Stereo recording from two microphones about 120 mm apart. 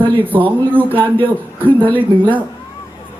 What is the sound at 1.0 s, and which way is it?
Speech, 45° right (ahead or behind).